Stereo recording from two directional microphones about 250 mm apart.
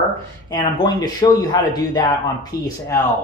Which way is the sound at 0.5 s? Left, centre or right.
Centre.